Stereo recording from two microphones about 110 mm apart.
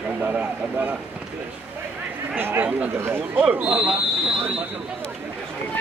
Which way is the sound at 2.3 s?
20° right (ahead or behind).